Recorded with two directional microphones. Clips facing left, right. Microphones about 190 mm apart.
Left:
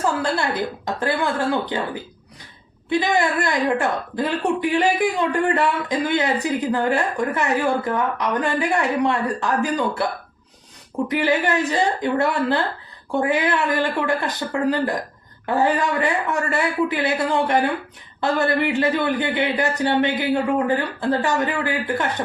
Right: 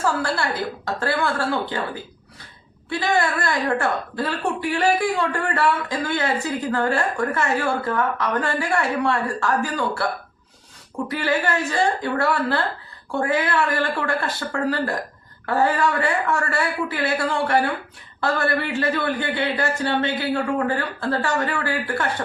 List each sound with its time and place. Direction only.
0.0 s speech: 20° left (ahead or behind)
2.9 s speech: 20° left (ahead or behind)
11.1 s speech: 20° left (ahead or behind)